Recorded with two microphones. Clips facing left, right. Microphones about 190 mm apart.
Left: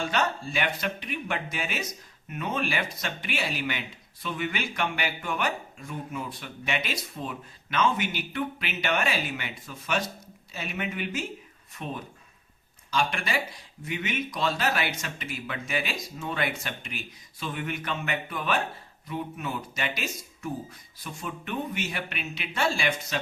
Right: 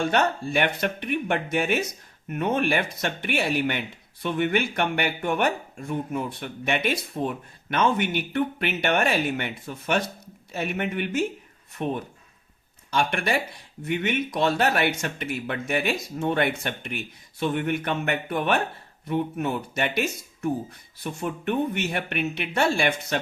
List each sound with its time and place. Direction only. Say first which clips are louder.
0.0 s speech: right 5 dB; 55° right (ahead or behind)